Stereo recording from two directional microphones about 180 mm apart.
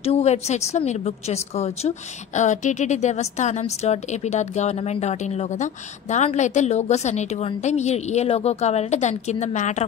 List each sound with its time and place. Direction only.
0.0 s a woman's voice: 35° left (ahead or behind)